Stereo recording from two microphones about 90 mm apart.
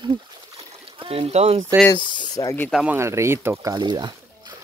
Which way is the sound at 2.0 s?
65° right (ahead or behind).